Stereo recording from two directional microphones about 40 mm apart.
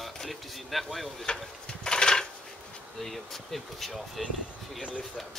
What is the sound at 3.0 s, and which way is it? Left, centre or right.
Speech, centre.